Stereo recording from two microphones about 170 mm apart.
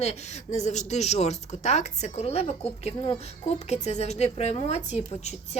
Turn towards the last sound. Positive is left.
turn(degrees=40)  # may be behind; listen again after turning